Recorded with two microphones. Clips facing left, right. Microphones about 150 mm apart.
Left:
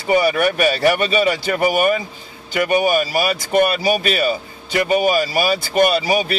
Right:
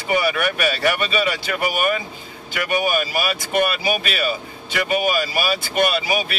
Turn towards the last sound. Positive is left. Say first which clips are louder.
# left 4 dB
turn(degrees=40)  # may be behind; listen again after turning